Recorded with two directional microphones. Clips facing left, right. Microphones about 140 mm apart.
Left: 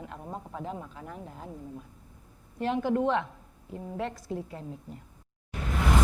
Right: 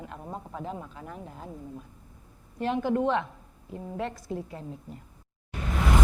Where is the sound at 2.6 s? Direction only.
20° right (ahead or behind).